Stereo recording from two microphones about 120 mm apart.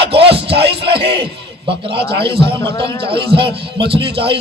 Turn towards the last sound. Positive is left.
turn(degrees=-45)  # may be behind; listen again after turning